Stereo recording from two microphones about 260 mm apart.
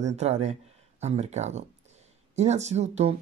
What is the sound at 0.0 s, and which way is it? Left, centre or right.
Speech, right.